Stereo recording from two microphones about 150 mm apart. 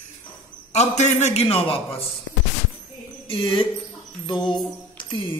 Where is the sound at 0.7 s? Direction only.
50° left (ahead or behind).